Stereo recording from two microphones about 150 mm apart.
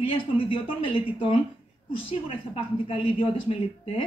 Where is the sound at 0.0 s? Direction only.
35° left (ahead or behind).